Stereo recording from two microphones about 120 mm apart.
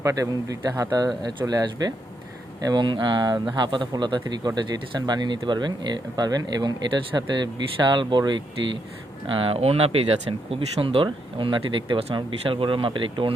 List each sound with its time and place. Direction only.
0.0 s speech: 30° right (ahead or behind); by 13.3 s 45° right (ahead or behind)